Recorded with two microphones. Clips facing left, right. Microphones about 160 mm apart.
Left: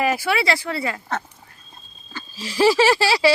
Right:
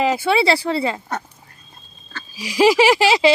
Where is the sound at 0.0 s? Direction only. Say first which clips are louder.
Right 4 dB; 20° right (ahead or behind).